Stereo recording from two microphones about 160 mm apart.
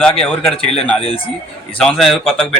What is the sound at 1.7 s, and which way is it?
Speech, 5° left (ahead or behind).